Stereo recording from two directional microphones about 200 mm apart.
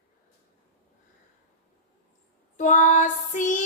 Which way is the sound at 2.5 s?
40° left (ahead or behind).